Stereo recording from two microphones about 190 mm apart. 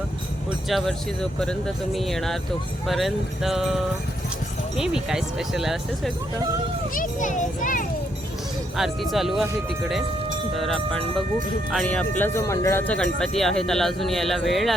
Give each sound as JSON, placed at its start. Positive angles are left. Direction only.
{"t": 0.7, "sound": "speech", "side_deg": 0}
{"t": 4.8, "sound": "speech", "side_deg": -5}
{"t": 6.9, "sound": "a child's voice", "side_deg": 45}
{"t": 8.7, "sound": "speech", "side_deg": 0}
{"t": 10.6, "sound": "speech", "side_deg": 0}